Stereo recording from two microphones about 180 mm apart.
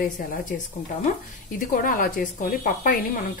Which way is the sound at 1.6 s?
50° left (ahead or behind).